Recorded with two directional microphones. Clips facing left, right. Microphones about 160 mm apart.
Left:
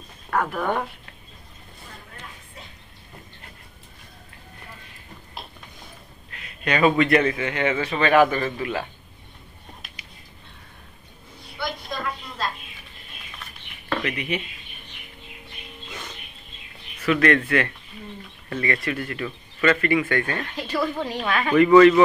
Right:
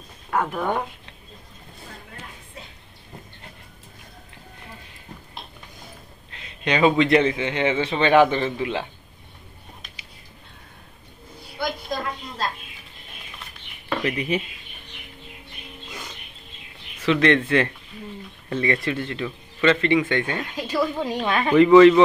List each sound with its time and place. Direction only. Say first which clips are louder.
0.3 s speech: even; 15° right (ahead or behind)
6.6 s speech: right 1 dB; 20° right (ahead or behind)
14.0 s speech: right 7 dB; 35° right (ahead or behind)
17.0 s speech: right 1 dB; 25° right (ahead or behind)